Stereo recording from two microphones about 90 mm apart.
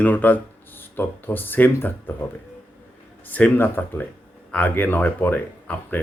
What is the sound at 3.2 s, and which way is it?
Speech, 20° left (ahead or behind).